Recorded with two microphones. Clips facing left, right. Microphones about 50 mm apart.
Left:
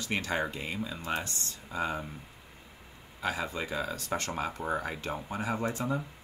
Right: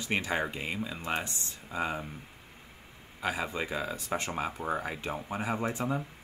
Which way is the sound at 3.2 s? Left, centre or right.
Centre.